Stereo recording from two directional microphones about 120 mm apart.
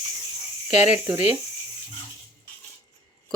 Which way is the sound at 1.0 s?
20° right (ahead or behind).